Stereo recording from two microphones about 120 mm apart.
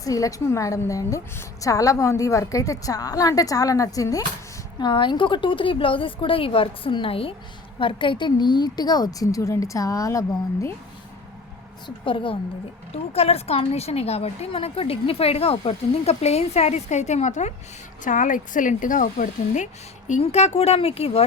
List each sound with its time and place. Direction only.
0.0 s a woman's voice: 30° left (ahead or behind)
4.8 s a woman's voice: 40° left (ahead or behind); by 10.7 s 25° left (ahead or behind)
12.0 s a woman's voice: 45° left (ahead or behind)
12.9 s a woman's voice: 60° left (ahead or behind); by 17.5 s 80° left
18.0 s speech: 90° left
20.2 s a woman's voice: 65° left (ahead or behind)